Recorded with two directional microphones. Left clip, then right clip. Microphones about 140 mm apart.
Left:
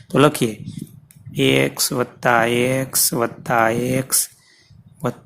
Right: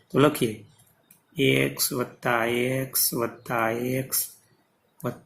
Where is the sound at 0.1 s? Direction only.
80° left.